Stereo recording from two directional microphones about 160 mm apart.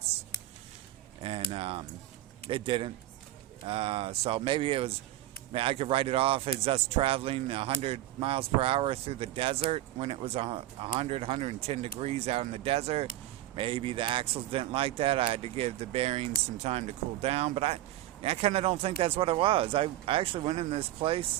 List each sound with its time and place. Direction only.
1.2 s a man's voice: 35° right (ahead or behind)